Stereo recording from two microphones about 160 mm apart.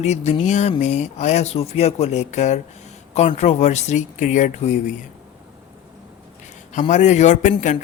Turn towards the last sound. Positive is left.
turn(degrees=45)  # may be behind; listen again after turning